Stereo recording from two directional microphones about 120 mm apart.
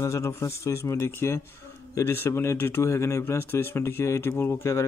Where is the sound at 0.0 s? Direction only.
25° left (ahead or behind).